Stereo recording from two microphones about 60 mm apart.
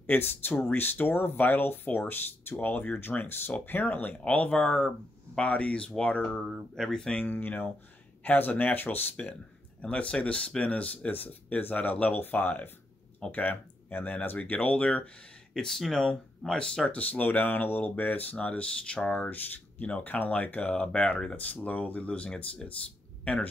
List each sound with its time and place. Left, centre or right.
0.0 s speech: left; by 7.2 s centre
7.2 s speech: left
9.8 s speech: centre
15.5 s speech: centre
16.9 s speech: left